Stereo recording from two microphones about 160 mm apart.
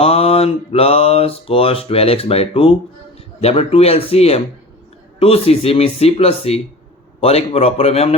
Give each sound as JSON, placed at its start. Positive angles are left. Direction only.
{"t": 0.0, "sound": "mantra", "side_deg": 35}